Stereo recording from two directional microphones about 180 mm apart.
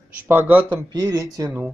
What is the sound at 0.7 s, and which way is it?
Speech, 20° right (ahead or behind).